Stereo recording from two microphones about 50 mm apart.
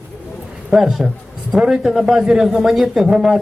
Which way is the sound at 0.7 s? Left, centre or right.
Centre.